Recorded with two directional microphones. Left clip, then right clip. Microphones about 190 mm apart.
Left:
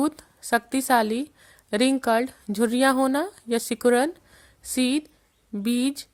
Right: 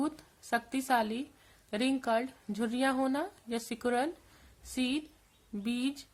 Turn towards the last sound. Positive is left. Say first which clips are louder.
# left 9 dB
turn(degrees=45)  # may be behind; listen again after turning